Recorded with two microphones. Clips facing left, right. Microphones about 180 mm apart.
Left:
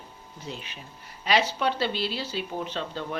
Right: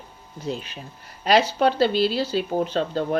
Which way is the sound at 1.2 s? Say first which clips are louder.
Right 6 dB; 40° right (ahead or behind).